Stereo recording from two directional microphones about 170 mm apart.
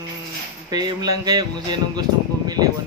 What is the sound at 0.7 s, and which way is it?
Speech, 20° right (ahead or behind).